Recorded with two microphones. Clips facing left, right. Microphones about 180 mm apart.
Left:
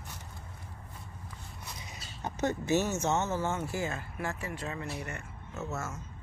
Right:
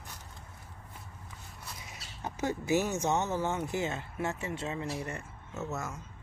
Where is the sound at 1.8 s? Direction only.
5° right (ahead or behind).